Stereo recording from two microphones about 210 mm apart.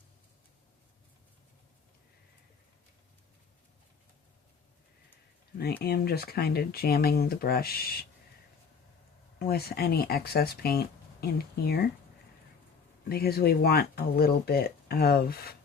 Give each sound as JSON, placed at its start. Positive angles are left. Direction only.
{"t": 5.8, "sound": "speech", "side_deg": 50}
{"t": 9.4, "sound": "speech", "side_deg": 50}
{"t": 13.1, "sound": "speech", "side_deg": 50}